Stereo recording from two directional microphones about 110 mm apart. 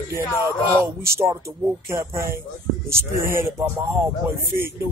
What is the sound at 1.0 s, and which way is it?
Speech, 25° right (ahead or behind).